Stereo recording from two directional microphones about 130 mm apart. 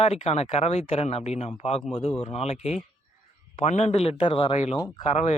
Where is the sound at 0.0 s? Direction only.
55° left (ahead or behind).